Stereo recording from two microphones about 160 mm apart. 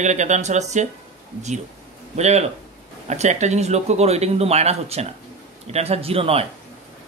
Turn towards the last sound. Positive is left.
turn(degrees=-35)  # may be behind; listen again after turning